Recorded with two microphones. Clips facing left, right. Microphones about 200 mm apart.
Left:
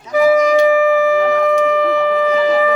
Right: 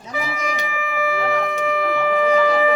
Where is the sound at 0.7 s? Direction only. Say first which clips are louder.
Left 12 dB; 40° left (ahead or behind).